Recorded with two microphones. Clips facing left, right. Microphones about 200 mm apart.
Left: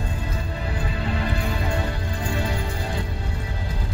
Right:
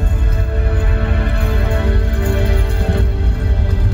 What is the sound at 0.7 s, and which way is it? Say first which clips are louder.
Music: right 5 dB; 60° right (ahead or behind).